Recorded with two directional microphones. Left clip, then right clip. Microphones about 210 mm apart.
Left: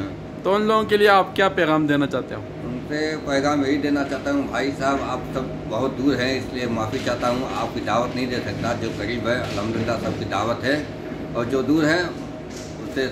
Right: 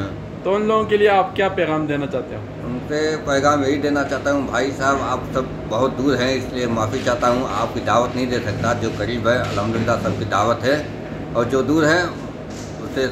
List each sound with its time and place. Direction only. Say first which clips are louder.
0.5 s a man's voice: right 1 dB; 25° left (ahead or behind)
2.9 s a man's voice: right 4 dB; 5° right (ahead or behind)